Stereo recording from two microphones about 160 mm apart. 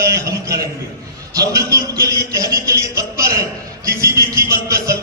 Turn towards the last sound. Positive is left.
turn(degrees=-20)  # may be behind; listen again after turning